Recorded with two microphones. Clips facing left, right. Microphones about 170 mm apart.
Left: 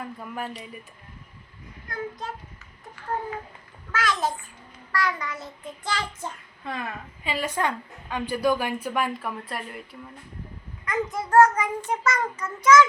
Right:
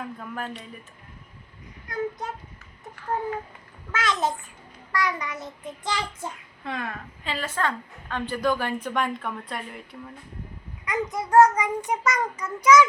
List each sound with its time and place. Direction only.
0.2 s speech: 5° left (ahead or behind)
1.9 s speech: 20° right (ahead or behind)
3.9 s speech: 20° right (ahead or behind)
4.9 s child singing: 15° right (ahead or behind)
6.7 s a woman's voice: centre (ahead or behind)
10.8 s child singing: 20° right (ahead or behind)